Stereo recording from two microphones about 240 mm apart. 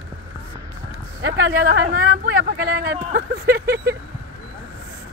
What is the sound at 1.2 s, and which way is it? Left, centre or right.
Speech, right.